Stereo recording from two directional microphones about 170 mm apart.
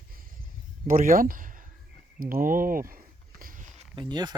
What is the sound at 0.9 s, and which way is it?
Speech, 55° right (ahead or behind).